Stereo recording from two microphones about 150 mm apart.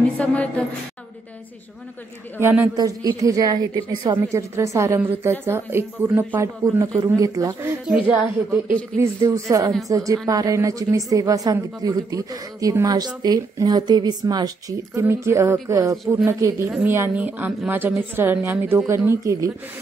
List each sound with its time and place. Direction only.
0.2 s a woman's voice: 10° left (ahead or behind)
2.4 s a woman's voice: 15° right (ahead or behind)
7.9 s a woman's voice: 10° right (ahead or behind)